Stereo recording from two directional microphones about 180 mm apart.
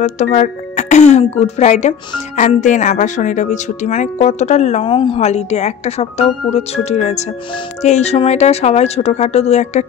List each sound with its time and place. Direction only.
0.0 s speech: 40° left (ahead or behind)